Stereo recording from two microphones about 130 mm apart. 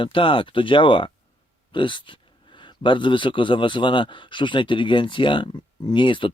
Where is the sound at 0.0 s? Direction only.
40° left (ahead or behind).